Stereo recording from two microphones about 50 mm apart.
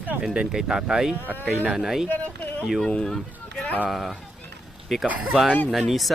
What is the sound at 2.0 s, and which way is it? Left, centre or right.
Speech, left.